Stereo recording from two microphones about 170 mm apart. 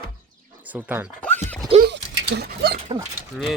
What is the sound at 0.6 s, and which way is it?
Speech, 10° right (ahead or behind).